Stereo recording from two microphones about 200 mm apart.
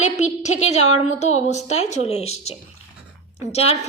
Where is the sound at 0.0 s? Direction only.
35° left (ahead or behind).